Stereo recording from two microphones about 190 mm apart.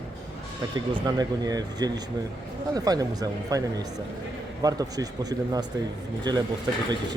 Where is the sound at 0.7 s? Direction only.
20° right (ahead or behind).